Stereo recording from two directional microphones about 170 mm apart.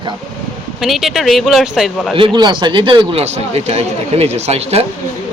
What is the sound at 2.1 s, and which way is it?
Speech, 30° right (ahead or behind).